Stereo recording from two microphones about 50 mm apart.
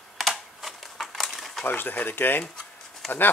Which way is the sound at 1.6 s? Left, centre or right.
Left.